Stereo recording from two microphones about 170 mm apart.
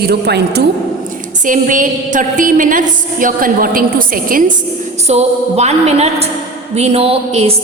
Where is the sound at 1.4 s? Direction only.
50° right (ahead or behind).